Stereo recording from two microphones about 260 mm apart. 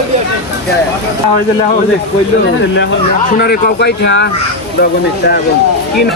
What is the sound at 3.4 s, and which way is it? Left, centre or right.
Speech, left.